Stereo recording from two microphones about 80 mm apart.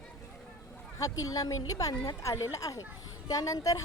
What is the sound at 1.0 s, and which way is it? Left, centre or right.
A woman's voice, left.